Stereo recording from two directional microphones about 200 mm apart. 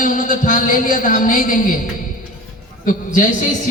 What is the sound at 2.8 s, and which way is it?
Speech, 40° left (ahead or behind).